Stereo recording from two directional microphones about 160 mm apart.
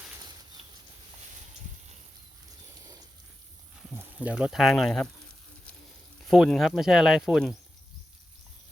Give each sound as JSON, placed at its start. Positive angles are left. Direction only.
{"t": 0.2, "sound": "a sound", "side_deg": -25}
{"t": 3.9, "sound": "speech", "side_deg": -10}
{"t": 6.2, "sound": "speech", "side_deg": 0}